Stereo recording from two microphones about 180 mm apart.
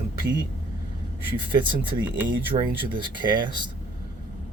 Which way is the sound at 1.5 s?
25° right (ahead or behind).